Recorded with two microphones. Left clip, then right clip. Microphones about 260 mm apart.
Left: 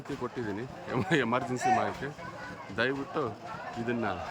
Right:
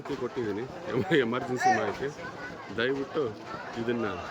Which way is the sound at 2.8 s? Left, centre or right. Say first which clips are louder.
Right 2 dB; centre.